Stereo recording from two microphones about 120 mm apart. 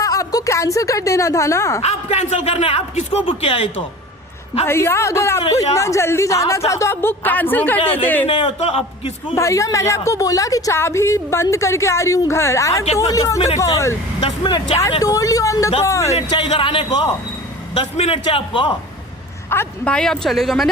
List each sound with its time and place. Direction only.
0.0 s speech: 30° left (ahead or behind)
1.8 s a man's voice: 65° left (ahead or behind)
4.6 s a woman's voice: 20° left (ahead or behind)
7.8 s a man's voice: 50° left (ahead or behind)
8.0 s speech: 15° left (ahead or behind)
8.3 s a man's voice: 50° left (ahead or behind)
9.3 s a woman's voice: 25° left (ahead or behind)
16.4 s a man's voice: 45° left (ahead or behind)
17.7 s a man's voice: 55° left (ahead or behind)
19.5 s a woman's voice: 20° left (ahead or behind)
19.9 s speech: 5° left (ahead or behind)